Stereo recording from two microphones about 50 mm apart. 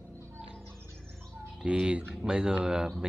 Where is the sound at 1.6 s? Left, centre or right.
Centre.